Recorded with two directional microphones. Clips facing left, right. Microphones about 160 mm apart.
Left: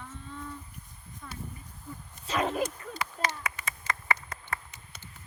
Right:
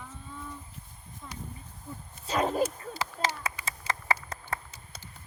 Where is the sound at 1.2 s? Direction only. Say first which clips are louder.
Even; 20° right (ahead or behind).